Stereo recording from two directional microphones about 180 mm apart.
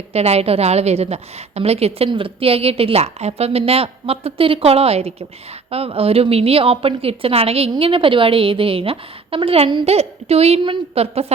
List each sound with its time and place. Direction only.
0.1 s a woman's voice: 35° right (ahead or behind)